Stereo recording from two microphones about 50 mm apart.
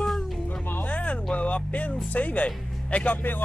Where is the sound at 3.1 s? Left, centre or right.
Left.